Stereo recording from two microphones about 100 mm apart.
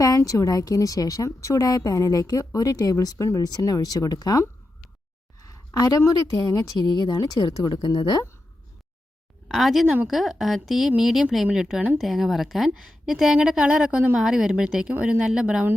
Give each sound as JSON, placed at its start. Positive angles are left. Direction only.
{"t": 0.0, "sound": "a woman's voice", "side_deg": 35}
{"t": 5.4, "sound": "a sound", "side_deg": 35}
{"t": 6.4, "sound": "speech", "side_deg": 40}
{"t": 9.5, "sound": "a woman's voice", "side_deg": 0}